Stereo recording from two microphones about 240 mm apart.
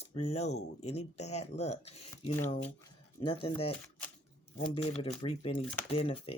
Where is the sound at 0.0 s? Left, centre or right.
Left.